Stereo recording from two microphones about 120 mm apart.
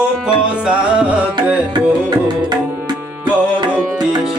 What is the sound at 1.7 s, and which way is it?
Music, 35° right (ahead or behind).